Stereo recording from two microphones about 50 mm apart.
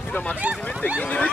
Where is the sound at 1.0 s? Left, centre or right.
Left.